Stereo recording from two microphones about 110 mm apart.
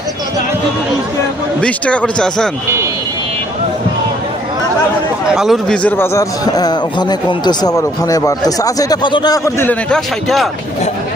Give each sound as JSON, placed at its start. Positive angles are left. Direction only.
{"t": 1.6, "sound": "speech", "side_deg": 10}
{"t": 5.3, "sound": "a man's voice", "side_deg": -5}
{"t": 6.0, "sound": "a man's voice", "side_deg": 30}
{"t": 9.9, "sound": "a man's voice", "side_deg": 0}